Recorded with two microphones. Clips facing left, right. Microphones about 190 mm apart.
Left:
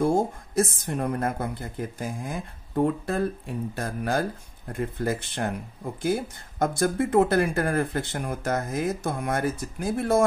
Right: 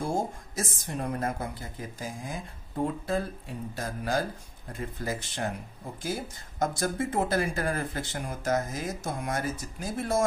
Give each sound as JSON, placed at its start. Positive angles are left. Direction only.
{"t": 0.0, "sound": "speech", "side_deg": 55}